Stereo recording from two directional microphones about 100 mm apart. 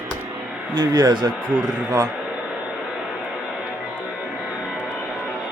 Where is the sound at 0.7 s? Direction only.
45° right (ahead or behind).